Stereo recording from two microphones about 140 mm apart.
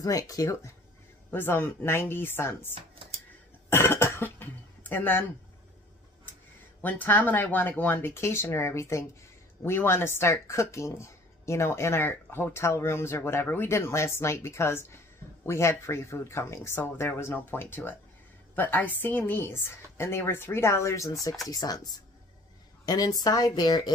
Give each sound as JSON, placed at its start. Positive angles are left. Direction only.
{"t": 0.0, "sound": "a woman's voice", "side_deg": 25}
{"t": 3.7, "sound": "cough", "side_deg": 20}
{"t": 6.8, "sound": "a woman's voice", "side_deg": 10}